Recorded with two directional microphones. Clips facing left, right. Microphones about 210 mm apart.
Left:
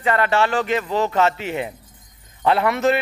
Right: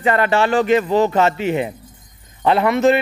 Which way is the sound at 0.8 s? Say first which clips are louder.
Right 4 dB; 15° right (ahead or behind).